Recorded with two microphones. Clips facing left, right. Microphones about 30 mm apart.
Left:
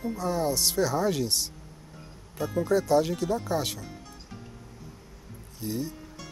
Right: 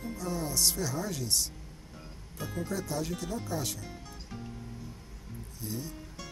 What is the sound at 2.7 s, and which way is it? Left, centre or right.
Speech, left.